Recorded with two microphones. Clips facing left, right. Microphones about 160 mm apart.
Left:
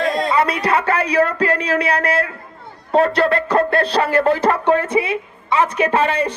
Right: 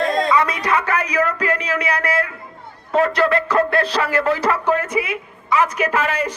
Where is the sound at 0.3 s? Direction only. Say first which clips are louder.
Left 1 dB; 30° left (ahead or behind).